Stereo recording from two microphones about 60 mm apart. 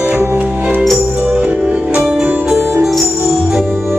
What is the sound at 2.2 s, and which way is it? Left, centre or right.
Music, right.